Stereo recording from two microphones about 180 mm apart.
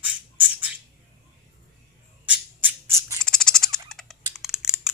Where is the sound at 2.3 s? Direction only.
15° right (ahead or behind).